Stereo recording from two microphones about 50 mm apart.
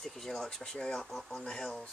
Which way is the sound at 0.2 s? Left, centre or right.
Centre.